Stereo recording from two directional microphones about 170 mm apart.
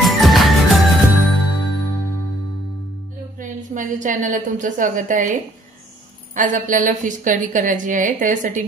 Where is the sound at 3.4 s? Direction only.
50° right (ahead or behind).